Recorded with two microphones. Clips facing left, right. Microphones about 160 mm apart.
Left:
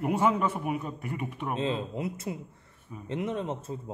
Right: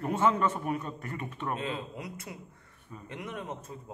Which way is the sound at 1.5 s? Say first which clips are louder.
Left 6 dB; 25° left (ahead or behind).